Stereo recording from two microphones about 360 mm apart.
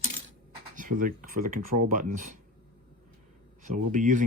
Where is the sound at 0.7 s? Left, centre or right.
Right.